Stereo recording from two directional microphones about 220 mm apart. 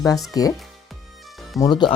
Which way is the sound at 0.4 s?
15° left (ahead or behind).